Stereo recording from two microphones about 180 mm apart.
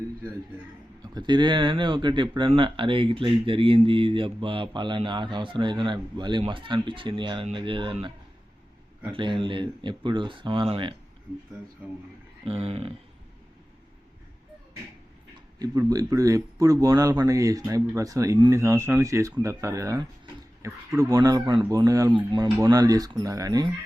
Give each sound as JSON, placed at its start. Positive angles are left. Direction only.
{"t": 1.1, "sound": "speech", "side_deg": -25}
{"t": 9.1, "sound": "speech", "side_deg": -25}
{"t": 11.8, "sound": "speech", "side_deg": -5}
{"t": 12.5, "sound": "speech", "side_deg": -30}
{"t": 15.5, "sound": "speech", "side_deg": -20}